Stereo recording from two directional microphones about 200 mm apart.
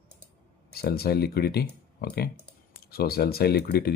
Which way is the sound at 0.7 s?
50° left (ahead or behind).